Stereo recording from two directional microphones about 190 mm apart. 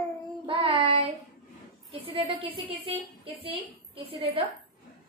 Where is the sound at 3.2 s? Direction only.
30° right (ahead or behind).